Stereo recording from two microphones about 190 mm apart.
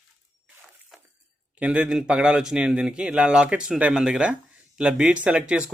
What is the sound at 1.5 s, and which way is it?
Speech, 5° right (ahead or behind).